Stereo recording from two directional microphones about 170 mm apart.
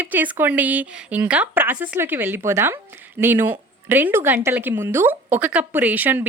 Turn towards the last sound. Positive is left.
turn(degrees=-10)  # may be behind; listen again after turning